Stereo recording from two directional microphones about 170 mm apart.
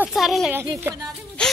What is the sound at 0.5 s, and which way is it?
Speech, 15° right (ahead or behind).